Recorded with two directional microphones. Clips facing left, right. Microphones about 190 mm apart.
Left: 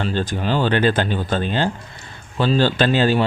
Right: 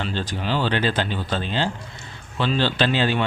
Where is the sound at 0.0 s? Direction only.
45° left (ahead or behind).